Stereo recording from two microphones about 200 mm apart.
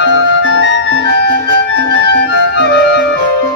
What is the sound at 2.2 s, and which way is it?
Music, 60° left (ahead or behind).